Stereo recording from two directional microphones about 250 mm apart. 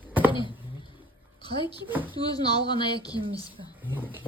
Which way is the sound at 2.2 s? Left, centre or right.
Centre.